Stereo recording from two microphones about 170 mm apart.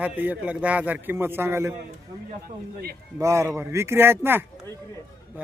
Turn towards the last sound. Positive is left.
turn(degrees=-15)  # may be behind; listen again after turning